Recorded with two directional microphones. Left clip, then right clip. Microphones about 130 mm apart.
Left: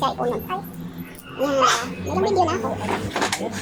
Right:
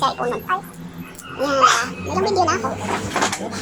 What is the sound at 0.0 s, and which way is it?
Speech, 10° left (ahead or behind).